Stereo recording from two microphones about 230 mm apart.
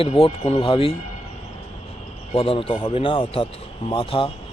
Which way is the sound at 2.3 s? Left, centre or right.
Left.